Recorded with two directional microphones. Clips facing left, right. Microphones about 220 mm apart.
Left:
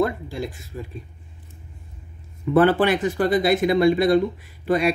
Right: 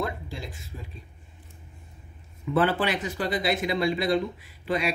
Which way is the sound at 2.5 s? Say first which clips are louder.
Left 7 dB; 50° left (ahead or behind).